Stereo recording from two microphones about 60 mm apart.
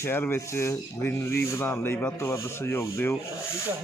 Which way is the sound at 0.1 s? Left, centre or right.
Left.